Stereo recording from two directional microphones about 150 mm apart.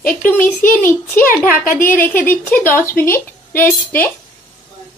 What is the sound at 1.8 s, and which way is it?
Speech, 70° left (ahead or behind).